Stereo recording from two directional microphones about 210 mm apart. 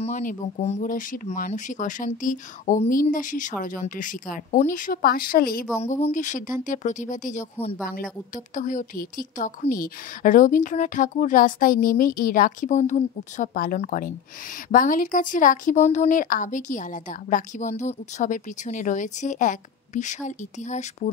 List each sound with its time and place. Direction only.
0.0 s speech: 40° left (ahead or behind)
5.8 s speech: 30° left (ahead or behind)